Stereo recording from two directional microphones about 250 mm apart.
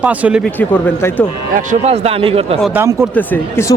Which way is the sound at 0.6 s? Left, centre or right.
Centre.